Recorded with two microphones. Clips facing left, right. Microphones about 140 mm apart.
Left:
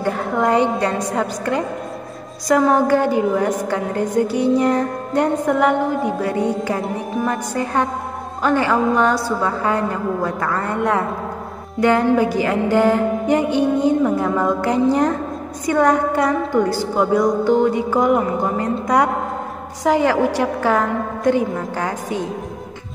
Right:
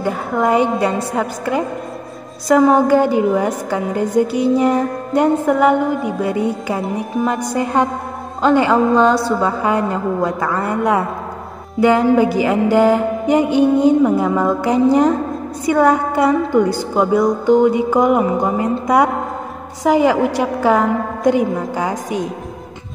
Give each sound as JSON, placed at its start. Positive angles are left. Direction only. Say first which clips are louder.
{"t": 0.0, "sound": "a woman's voice", "louder": "right 1 dB", "side_deg": -5}
{"t": 7.2, "sound": "a woman's voice", "louder": "right 3 dB", "side_deg": -15}